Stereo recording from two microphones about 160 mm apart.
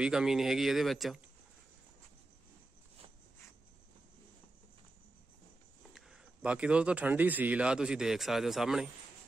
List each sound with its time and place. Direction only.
0.0 s speech: 5° right (ahead or behind)
5.9 s speech: 5° right (ahead or behind)